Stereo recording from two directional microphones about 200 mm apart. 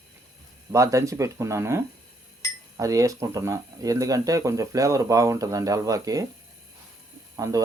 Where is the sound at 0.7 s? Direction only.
15° right (ahead or behind).